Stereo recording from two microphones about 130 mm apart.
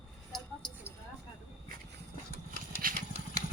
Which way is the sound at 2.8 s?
90° right.